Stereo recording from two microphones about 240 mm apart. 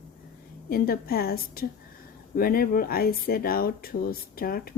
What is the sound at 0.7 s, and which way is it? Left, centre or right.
Speech, left.